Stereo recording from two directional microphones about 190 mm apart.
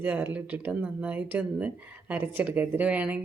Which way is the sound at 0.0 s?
10° right (ahead or behind).